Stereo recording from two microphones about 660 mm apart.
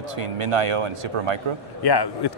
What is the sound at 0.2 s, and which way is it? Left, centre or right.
Speech, right.